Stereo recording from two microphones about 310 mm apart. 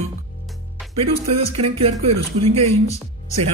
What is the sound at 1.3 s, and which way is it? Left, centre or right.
Speech, centre.